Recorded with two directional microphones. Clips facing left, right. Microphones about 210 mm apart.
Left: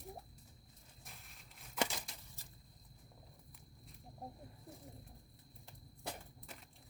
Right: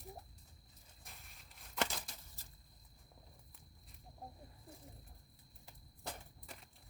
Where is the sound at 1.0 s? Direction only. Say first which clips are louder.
Left 1 dB; centre (ahead or behind).